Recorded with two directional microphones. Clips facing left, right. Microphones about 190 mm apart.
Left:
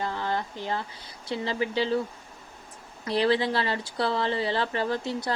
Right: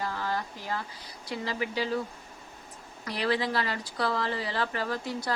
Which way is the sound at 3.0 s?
30° left (ahead or behind).